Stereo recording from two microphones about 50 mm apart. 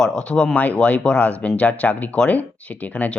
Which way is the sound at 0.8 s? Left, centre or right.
Left.